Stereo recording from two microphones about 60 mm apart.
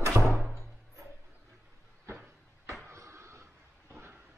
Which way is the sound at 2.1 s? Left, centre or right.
Right.